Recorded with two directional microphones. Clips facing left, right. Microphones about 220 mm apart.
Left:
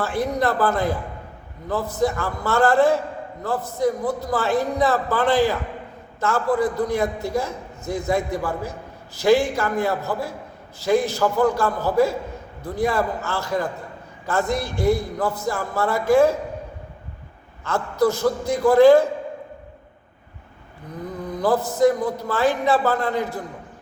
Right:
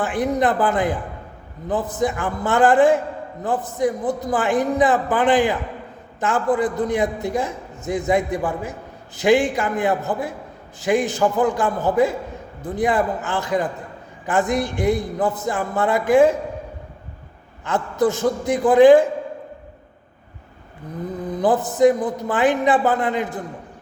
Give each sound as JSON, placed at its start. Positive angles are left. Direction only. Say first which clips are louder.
{"t": 0.0, "sound": "a man's voice", "louder": "right 2 dB", "side_deg": -20}
{"t": 17.7, "sound": "a man's voice", "louder": "right 1 dB", "side_deg": -20}
{"t": 21.2, "sound": "a man's voice", "louder": "right 1 dB", "side_deg": -20}